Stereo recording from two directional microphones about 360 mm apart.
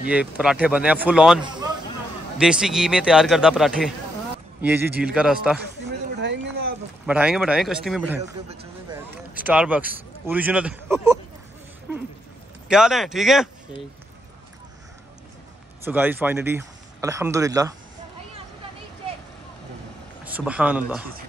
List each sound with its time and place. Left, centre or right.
0.1 s speech: centre
5.6 s a sound: right
7.1 s speech: centre
8.2 s a man's voice: centre
9.3 s speech: centre
12.6 s speech: centre
15.8 s speech: centre
20.2 s speech: centre